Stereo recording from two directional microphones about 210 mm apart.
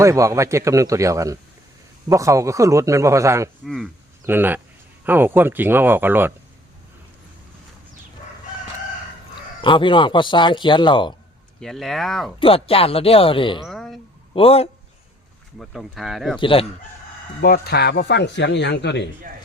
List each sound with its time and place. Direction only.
0.0 s a man's voice: 15° right (ahead or behind)
9.6 s speech: 25° left (ahead or behind)
11.6 s speech: centre (ahead or behind)
12.4 s speech: 25° left (ahead or behind)
13.7 s a sound: centre (ahead or behind)
14.3 s speech: 25° left (ahead or behind)
15.5 s speech: centre (ahead or behind)
16.4 s speech: 25° left (ahead or behind)
17.4 s speech: 50° left (ahead or behind)